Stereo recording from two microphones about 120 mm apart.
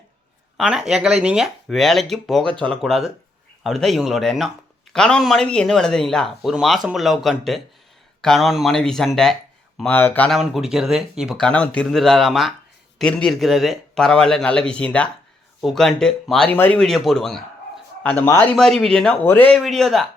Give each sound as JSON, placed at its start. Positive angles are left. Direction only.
{"t": 0.5, "sound": "speech", "side_deg": -5}
{"t": 9.8, "sound": "speech", "side_deg": 15}
{"t": 10.2, "sound": "speech", "side_deg": 0}
{"t": 11.3, "sound": "speech", "side_deg": 10}
{"t": 16.8, "sound": "a man's voice", "side_deg": 0}
{"t": 19.5, "sound": "speech", "side_deg": 0}